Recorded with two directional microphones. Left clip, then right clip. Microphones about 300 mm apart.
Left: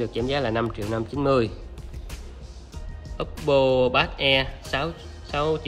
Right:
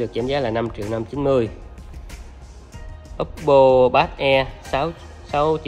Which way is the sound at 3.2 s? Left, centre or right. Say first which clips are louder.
Right 7 dB; centre.